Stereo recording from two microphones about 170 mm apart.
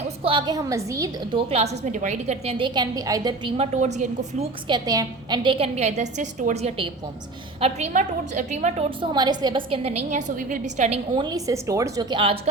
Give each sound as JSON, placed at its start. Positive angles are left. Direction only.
{"t": 0.3, "sound": "a woman's voice", "side_deg": -25}
{"t": 1.5, "sound": "a woman's voice", "side_deg": -40}
{"t": 3.6, "sound": "a woman's voice", "side_deg": -40}
{"t": 4.7, "sound": "a woman's voice", "side_deg": -25}
{"t": 9.0, "sound": "a woman's voice", "side_deg": -25}